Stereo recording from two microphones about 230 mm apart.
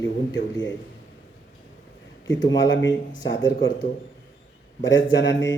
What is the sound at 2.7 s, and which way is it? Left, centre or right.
Speech, left.